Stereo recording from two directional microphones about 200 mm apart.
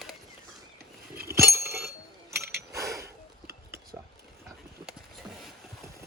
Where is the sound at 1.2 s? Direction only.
15° right (ahead or behind).